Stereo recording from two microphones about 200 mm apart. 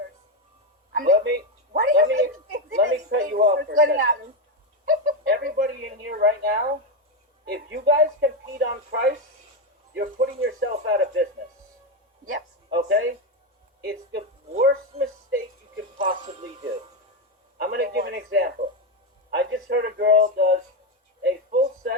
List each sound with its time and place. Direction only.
0.9 s a woman's voice: 50° right (ahead or behind)
13.8 s speech: 50° right (ahead or behind)
16.0 s speech: 40° right (ahead or behind)
17.6 s speech: 50° right (ahead or behind)
21.2 s a sound: 55° right (ahead or behind)